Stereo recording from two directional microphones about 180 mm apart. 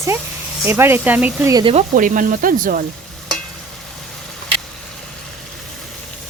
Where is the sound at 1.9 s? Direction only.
50° right (ahead or behind).